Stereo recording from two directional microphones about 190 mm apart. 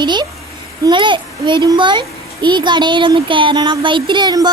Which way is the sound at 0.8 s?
25° right (ahead or behind).